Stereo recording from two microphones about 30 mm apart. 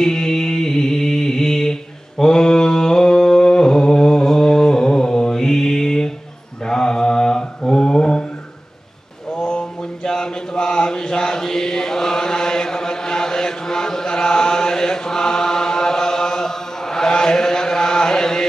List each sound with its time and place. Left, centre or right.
0.0 s a sound: left
6.6 s mantra: left
9.3 s mantra: left